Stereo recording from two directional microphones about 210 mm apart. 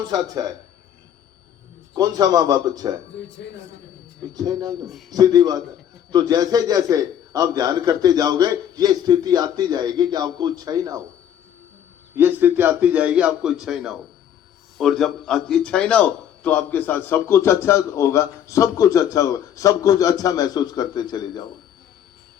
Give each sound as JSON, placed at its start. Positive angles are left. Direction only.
{"t": 0.1, "sound": "speech", "side_deg": -20}
{"t": 1.9, "sound": "a man's voice", "side_deg": -20}
{"t": 4.4, "sound": "a man's voice", "side_deg": -20}
{"t": 12.1, "sound": "a man's voice", "side_deg": -10}